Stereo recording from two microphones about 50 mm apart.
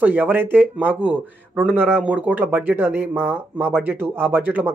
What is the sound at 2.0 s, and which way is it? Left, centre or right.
Speech, right.